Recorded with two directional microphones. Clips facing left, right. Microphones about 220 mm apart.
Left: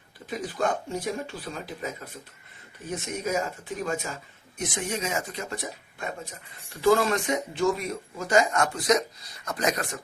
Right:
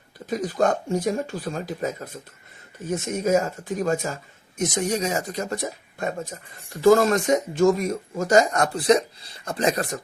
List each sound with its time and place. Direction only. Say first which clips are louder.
0.3 s speech: right 6 dB; 45° right (ahead or behind)
2.9 s speech: right 7 dB; 45° right (ahead or behind)